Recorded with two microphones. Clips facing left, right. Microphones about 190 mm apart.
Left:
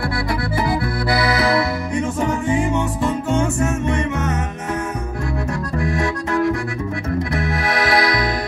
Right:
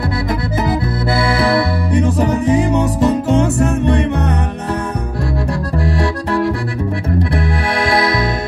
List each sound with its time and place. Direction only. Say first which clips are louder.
0.7 s music: right 3 dB; 25° right (ahead or behind)
5.5 s accordion: right 3 dB; 35° right (ahead or behind)